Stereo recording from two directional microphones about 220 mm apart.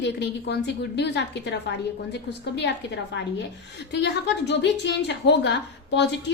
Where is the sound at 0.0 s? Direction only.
50° left (ahead or behind).